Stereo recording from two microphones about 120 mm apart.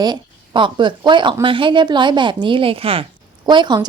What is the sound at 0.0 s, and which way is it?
Speech, 40° right (ahead or behind).